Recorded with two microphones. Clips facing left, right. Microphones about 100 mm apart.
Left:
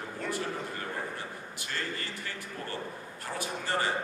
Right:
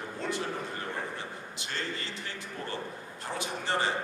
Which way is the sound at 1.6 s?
20° right (ahead or behind).